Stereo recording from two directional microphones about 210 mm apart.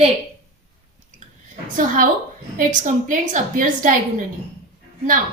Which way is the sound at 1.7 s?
40° right (ahead or behind).